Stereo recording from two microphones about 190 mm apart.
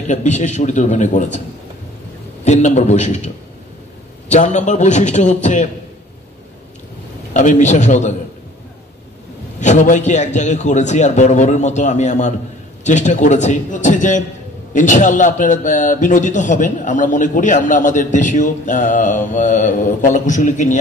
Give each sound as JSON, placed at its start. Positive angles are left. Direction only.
{"t": 0.1, "sound": "a man's voice", "side_deg": 40}
{"t": 2.4, "sound": "a man's voice", "side_deg": 35}
{"t": 4.3, "sound": "a man's voice", "side_deg": 40}
{"t": 7.3, "sound": "a man's voice", "side_deg": 40}
{"t": 9.6, "sound": "a man's voice", "side_deg": 40}